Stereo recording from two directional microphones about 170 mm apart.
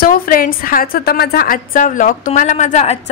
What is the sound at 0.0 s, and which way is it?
A woman's voice, 60° left (ahead or behind).